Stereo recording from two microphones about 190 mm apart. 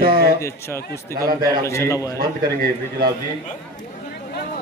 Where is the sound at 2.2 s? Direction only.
55° right (ahead or behind).